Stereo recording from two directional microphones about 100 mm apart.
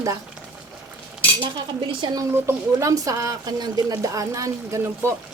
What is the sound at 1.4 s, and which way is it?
Cutlery, 55° right (ahead or behind).